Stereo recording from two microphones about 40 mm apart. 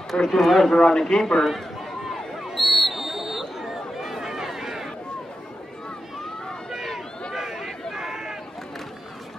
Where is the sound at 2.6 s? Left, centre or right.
Centre.